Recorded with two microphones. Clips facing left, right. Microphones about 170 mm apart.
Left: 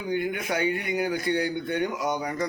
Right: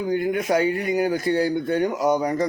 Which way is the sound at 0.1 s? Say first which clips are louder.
Right 5 dB; 35° right (ahead or behind).